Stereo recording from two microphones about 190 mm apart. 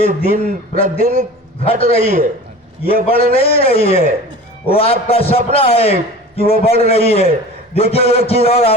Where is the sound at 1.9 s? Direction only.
30° left (ahead or behind).